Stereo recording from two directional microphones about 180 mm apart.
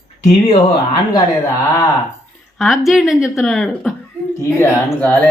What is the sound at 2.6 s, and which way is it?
A woman's voice, centre (ahead or behind).